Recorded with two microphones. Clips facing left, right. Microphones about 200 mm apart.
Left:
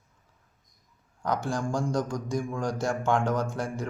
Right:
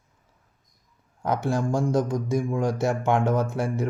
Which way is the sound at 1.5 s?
25° right (ahead or behind).